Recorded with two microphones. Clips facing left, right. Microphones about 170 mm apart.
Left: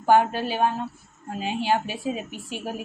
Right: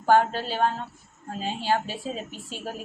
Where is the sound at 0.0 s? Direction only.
15° left (ahead or behind).